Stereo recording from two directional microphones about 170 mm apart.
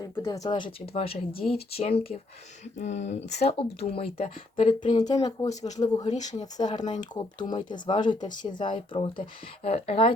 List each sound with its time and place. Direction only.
0.0 s speech: 20° left (ahead or behind)
5.5 s speech: 45° left (ahead or behind)
6.4 s speech: 25° left (ahead or behind)